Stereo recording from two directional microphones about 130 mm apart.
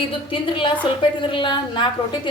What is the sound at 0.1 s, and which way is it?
A woman's voice, 45° left (ahead or behind).